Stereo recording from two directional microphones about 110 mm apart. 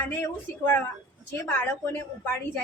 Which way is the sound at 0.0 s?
20° left (ahead or behind).